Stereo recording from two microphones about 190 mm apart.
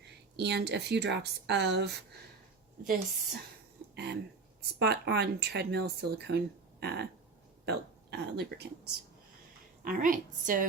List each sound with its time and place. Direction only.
0.3 s speech: 65° right (ahead or behind)
2.8 s a woman's voice: 50° right (ahead or behind)
3.9 s speech: 60° right (ahead or behind)
8.4 s speech: 60° right (ahead or behind)
9.8 s a woman's voice: 45° right (ahead or behind)